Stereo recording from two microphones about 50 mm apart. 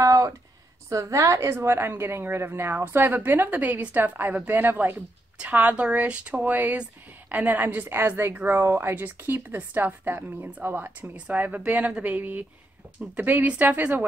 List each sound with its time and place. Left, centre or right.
0.0 s a sound: right
0.8 s a woman's voice: right
5.5 s speech: right
6.4 s a woman's voice: right
11.1 s a woman's voice: right